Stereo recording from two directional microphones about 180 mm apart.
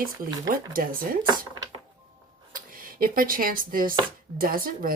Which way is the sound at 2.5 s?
50° right (ahead or behind).